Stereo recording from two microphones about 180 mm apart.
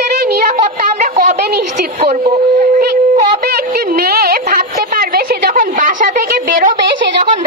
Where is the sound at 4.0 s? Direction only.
55° right (ahead or behind).